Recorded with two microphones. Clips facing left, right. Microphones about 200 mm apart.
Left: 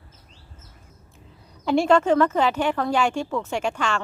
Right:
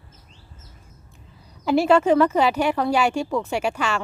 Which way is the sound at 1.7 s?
5° right (ahead or behind).